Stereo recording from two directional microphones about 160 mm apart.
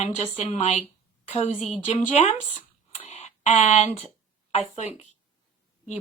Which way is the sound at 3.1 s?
45° left (ahead or behind).